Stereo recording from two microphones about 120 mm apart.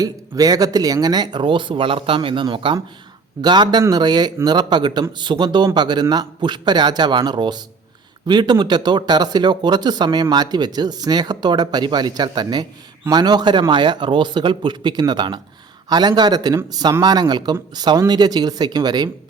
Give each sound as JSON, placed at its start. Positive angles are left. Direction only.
{"t": 0.0, "sound": "speech", "side_deg": -30}